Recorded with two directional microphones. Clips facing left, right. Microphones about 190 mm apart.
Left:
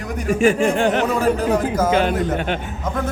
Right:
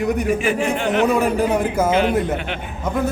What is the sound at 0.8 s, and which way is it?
A man's voice, 40° left (ahead or behind).